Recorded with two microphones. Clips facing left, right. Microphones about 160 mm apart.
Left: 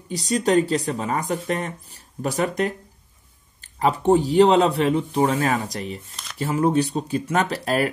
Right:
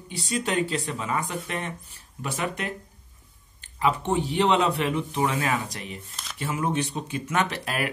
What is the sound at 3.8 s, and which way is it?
Speech, 40° left (ahead or behind).